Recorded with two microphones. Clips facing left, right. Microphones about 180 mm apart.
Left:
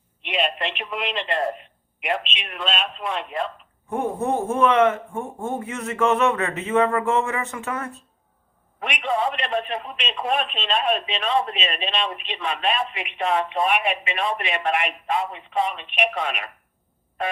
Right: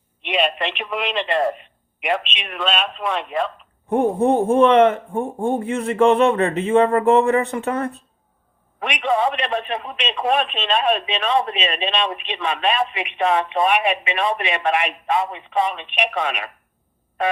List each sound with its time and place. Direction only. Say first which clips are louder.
0.2 s speech: right 4 dB; 80° right
3.8 s a man's voice: right 7 dB; 35° right (ahead or behind)
8.8 s speech: right 4 dB; 75° right (ahead or behind)